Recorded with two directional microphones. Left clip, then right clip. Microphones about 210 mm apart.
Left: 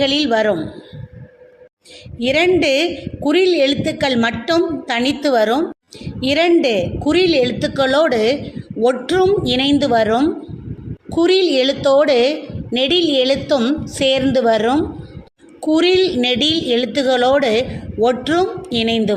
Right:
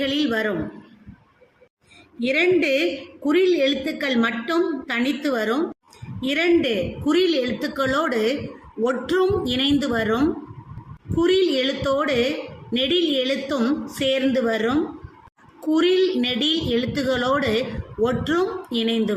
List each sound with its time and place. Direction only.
0.0 s a woman's voice: 15° left (ahead or behind)
2.1 s a woman's voice: 20° left (ahead or behind)
11.2 s a woman's voice: 15° left (ahead or behind)